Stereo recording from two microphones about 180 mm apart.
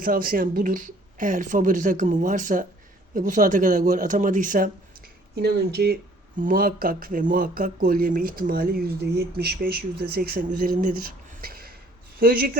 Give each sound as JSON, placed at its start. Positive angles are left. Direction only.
{"t": 0.0, "sound": "speech", "side_deg": -50}
{"t": 5.3, "sound": "speech", "side_deg": -65}